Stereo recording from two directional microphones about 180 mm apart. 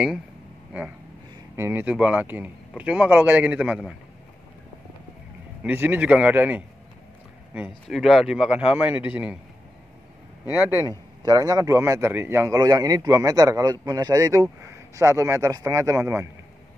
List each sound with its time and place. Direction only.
1.6 s a man's voice: 10° right (ahead or behind)
5.6 s a man's voice: 10° right (ahead or behind)
7.9 s a man's voice: centre (ahead or behind)
10.9 s a man's voice: 20° right (ahead or behind)